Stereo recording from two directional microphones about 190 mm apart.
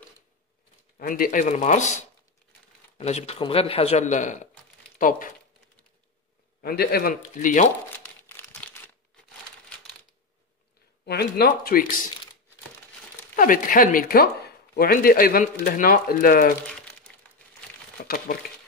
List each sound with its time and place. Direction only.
0.9 s speech: 50° left (ahead or behind)
6.6 s speech: 55° left (ahead or behind)
8.4 s crumpling: 10° left (ahead or behind)
11.1 s speech: 55° left (ahead or behind)
13.4 s speech: 45° left (ahead or behind)
18.0 s speech: 50° left (ahead or behind)